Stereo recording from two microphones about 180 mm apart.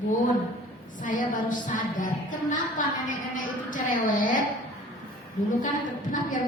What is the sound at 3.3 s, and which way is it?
A woman's voice, 45° left (ahead or behind).